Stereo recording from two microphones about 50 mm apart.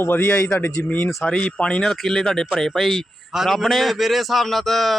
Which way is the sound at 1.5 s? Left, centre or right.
Centre.